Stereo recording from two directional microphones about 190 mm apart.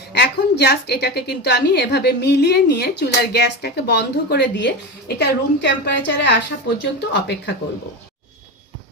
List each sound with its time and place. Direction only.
0.1 s a woman's voice: 60° left (ahead or behind)